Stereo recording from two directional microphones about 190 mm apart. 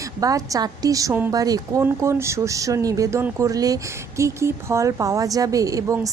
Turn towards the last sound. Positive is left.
turn(degrees=-15)  # may be behind; listen again after turning